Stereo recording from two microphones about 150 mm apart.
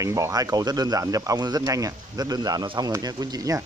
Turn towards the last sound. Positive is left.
turn(degrees=-25)  # may be behind; listen again after turning